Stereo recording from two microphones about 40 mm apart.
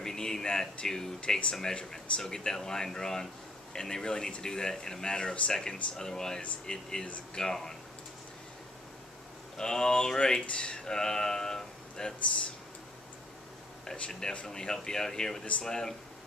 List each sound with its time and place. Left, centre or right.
0.0 s speech: centre
9.6 s speech: centre
14.3 s speech: centre